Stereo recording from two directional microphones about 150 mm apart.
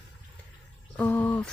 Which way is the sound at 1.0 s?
10° left (ahead or behind).